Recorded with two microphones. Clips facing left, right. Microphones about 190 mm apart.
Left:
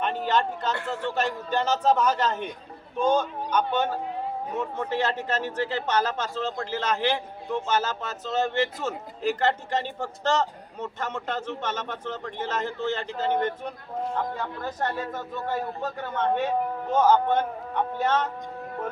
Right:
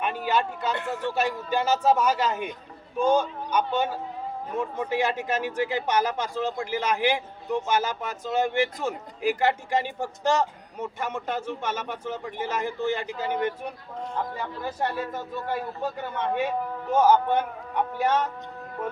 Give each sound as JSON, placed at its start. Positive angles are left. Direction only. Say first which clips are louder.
{"t": 0.0, "sound": "speech", "louder": "left 1 dB", "side_deg": -10}